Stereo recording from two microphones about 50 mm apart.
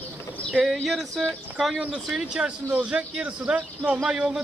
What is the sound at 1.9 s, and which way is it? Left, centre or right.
A man's voice, centre.